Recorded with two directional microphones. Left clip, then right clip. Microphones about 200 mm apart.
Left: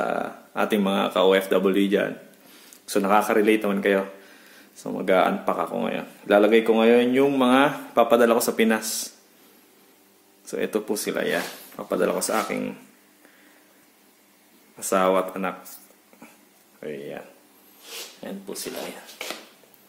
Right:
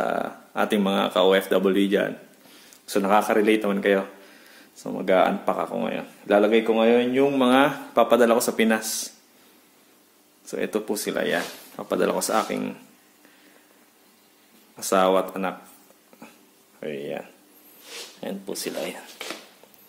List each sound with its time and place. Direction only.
0.0 s speech: 10° right (ahead or behind)
10.4 s speech: 5° right (ahead or behind)
14.8 s speech: 15° right (ahead or behind)
16.8 s speech: 35° right (ahead or behind)
18.2 s speech: 35° right (ahead or behind)